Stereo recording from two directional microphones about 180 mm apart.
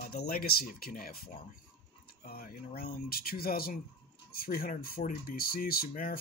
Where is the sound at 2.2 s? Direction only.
55° left (ahead or behind).